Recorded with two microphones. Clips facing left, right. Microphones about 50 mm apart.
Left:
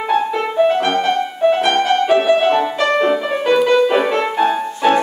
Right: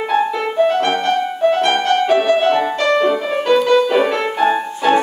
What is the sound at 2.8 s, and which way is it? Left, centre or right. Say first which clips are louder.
Music: even; centre.